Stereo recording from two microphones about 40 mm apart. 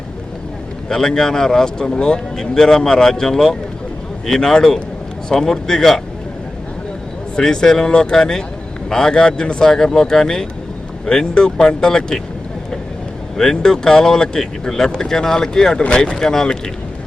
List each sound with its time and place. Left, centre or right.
0.9 s speech: centre
7.3 s speech: centre
13.3 s speech: centre